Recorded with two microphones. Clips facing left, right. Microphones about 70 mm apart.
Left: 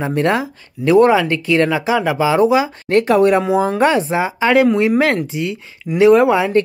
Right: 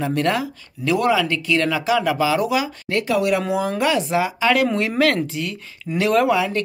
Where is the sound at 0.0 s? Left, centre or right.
Left.